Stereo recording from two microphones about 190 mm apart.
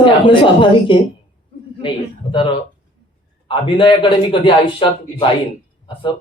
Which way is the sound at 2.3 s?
25° left (ahead or behind).